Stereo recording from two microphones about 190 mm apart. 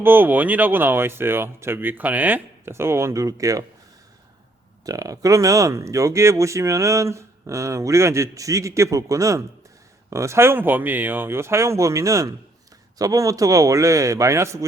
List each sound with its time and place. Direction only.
0.0 s speech: 10° right (ahead or behind)
4.9 s speech: 20° right (ahead or behind)